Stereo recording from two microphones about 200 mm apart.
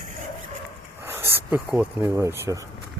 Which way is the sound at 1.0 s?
10° right (ahead or behind).